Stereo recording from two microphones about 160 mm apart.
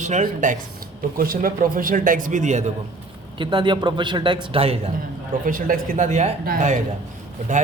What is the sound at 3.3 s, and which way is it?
Speech, 30° right (ahead or behind).